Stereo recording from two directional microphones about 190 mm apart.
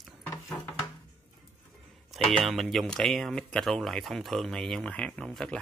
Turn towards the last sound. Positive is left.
turn(degrees=5)  # may be behind; listen again after turning